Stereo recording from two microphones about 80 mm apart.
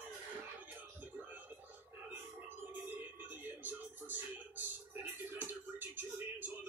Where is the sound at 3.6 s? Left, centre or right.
Right.